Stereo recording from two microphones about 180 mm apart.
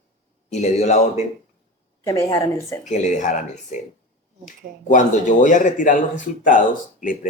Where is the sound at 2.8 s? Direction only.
45° left (ahead or behind).